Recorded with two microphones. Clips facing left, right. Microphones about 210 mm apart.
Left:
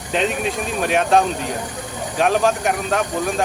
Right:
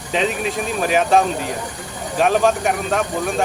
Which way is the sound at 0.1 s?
Centre (ahead or behind).